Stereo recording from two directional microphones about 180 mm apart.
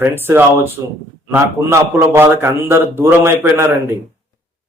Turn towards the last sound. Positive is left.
turn(degrees=-10)  # may be behind; listen again after turning